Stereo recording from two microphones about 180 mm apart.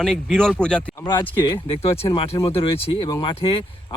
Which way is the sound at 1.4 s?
25° left (ahead or behind).